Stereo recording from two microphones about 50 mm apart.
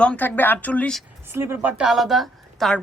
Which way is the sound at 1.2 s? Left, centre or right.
Right.